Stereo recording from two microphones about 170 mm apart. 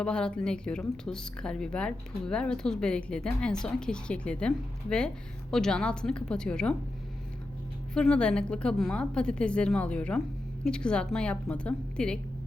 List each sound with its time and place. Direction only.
0.0 s speech: 5° left (ahead or behind)
7.9 s speech: 5° left (ahead or behind)